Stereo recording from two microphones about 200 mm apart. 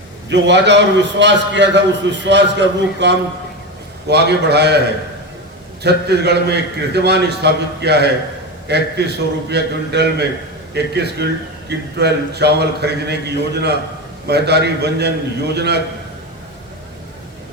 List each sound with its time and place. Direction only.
0.3 s a man's voice: 60° right (ahead or behind)
5.8 s a man's voice: 55° right (ahead or behind)